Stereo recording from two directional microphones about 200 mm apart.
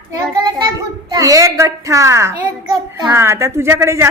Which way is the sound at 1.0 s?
15° right (ahead or behind).